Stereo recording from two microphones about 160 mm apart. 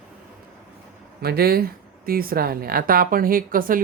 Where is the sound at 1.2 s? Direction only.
75° right (ahead or behind).